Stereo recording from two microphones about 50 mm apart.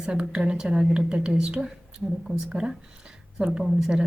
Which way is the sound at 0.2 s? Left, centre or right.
Right.